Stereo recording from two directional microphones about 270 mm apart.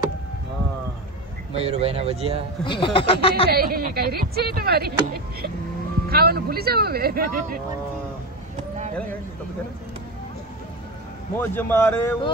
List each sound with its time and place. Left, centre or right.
1.5 s speech: right
2.6 s speech: centre
3.4 s speech: right
11.3 s a man's voice: centre